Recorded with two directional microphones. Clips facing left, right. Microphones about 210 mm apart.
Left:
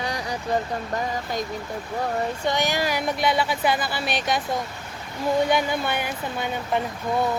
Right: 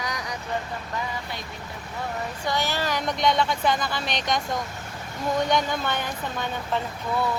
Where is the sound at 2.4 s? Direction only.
20° left (ahead or behind).